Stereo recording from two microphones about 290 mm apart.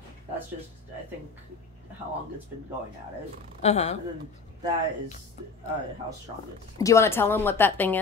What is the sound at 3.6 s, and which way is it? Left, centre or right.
Speech, left.